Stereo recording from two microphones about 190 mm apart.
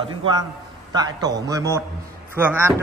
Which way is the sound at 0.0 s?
25° right (ahead or behind).